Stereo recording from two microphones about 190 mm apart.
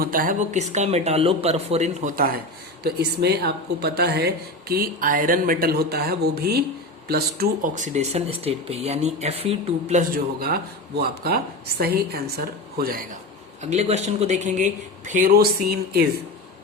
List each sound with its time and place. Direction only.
0.0 s speech: 50° right (ahead or behind); by 10.0 s 30° right (ahead or behind)
10.4 s a woman's voice: 55° right (ahead or behind)
13.6 s speech: 35° right (ahead or behind); by 16.0 s 55° right (ahead or behind)